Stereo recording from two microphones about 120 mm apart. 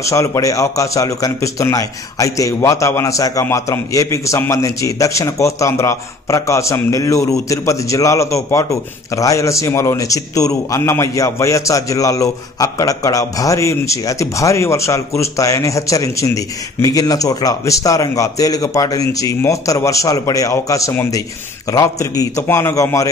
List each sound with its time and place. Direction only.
0.0 s speech: 25° left (ahead or behind)